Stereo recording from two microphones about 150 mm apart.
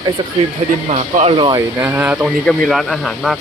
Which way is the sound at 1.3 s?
35° right (ahead or behind).